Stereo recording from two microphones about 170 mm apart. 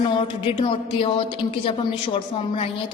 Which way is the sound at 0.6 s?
30° left (ahead or behind).